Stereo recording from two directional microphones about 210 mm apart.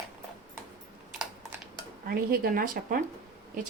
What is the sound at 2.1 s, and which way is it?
Speech, 45° right (ahead or behind).